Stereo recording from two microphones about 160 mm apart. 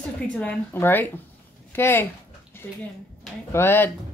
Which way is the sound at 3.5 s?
15° left (ahead or behind).